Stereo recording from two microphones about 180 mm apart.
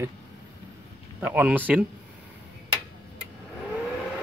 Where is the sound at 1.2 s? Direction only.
10° right (ahead or behind).